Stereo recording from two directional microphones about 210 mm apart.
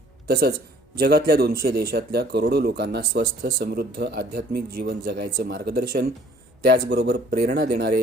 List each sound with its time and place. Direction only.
0.3 s speech: 45° right (ahead or behind)